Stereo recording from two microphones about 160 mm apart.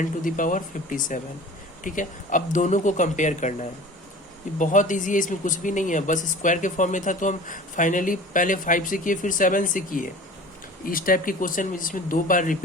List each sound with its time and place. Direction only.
0.0 s speech: 55° left (ahead or behind)